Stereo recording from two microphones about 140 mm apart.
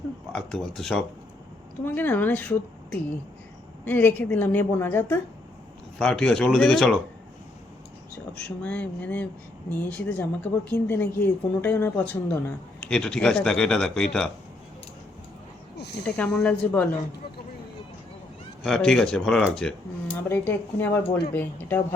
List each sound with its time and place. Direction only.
0.3 s speech: 5° left (ahead or behind)
1.8 s speech: 15° left (ahead or behind)
6.0 s speech: 5° left (ahead or behind)
8.4 s speech: 10° left (ahead or behind)
16.0 s speech: 10° left (ahead or behind)
18.6 s speech: 5° left (ahead or behind)
20.2 s speech: 15° left (ahead or behind)